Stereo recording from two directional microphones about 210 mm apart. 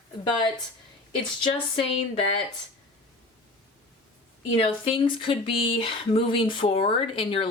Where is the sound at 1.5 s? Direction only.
25° left (ahead or behind).